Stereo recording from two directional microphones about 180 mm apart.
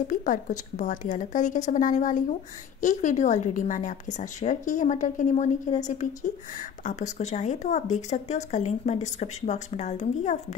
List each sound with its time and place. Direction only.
0.1 s a woman's voice: 45° left (ahead or behind)